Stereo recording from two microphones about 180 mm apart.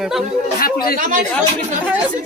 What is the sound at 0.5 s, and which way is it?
Speech, 55° left (ahead or behind).